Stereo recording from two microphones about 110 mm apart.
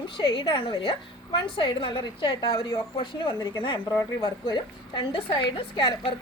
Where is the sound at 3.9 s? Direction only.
35° left (ahead or behind); by 6.1 s 50° left (ahead or behind).